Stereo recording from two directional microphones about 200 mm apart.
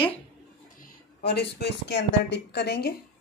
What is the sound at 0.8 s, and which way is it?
A woman's voice, 50° left (ahead or behind).